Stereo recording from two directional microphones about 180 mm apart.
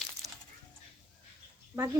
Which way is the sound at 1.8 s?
15° right (ahead or behind).